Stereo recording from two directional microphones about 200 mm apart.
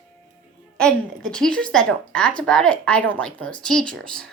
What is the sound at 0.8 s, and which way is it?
A woman's voice, 5° left (ahead or behind).